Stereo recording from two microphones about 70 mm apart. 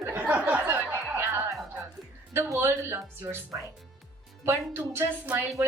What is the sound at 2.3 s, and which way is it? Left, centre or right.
Speech, right.